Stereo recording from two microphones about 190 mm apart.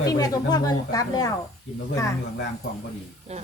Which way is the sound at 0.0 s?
20° left (ahead or behind).